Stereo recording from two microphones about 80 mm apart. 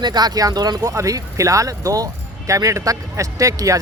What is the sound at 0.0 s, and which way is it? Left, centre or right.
Speech, right.